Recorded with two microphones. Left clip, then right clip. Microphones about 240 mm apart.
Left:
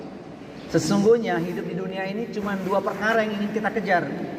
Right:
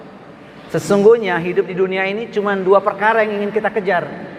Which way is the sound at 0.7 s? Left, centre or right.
Right.